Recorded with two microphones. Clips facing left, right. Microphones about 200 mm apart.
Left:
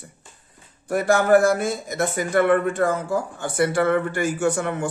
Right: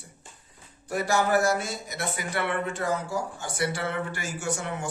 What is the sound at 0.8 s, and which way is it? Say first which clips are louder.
A man's voice: left 7 dB; 55° left (ahead or behind).